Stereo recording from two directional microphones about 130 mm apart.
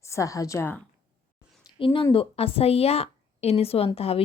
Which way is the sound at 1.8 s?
40° left (ahead or behind).